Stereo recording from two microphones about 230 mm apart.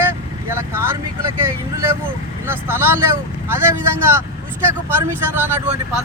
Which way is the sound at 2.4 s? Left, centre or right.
Centre.